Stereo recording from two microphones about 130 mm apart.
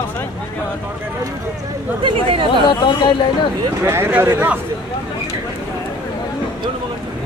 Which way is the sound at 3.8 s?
15° right (ahead or behind).